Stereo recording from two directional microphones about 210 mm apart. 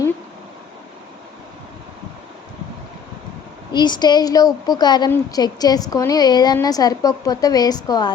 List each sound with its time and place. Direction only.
3.7 s a woman's voice: 20° left (ahead or behind)